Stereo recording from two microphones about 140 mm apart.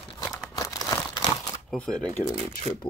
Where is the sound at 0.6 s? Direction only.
25° left (ahead or behind).